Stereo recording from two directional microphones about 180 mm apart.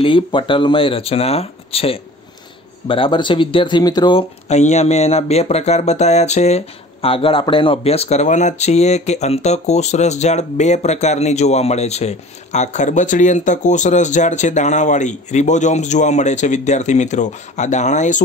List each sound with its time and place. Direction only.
0.0 s speech: 30° left (ahead or behind)